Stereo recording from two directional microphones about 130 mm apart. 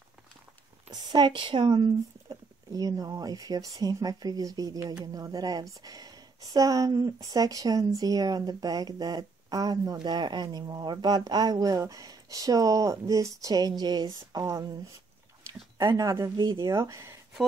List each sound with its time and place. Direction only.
1.1 s speech: 35° right (ahead or behind)
15.8 s speech: 25° right (ahead or behind)